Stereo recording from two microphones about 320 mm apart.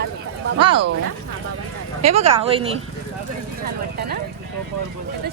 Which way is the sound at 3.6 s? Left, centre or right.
Right.